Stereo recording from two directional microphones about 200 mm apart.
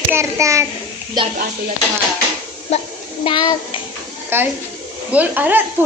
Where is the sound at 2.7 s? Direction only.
30° left (ahead or behind).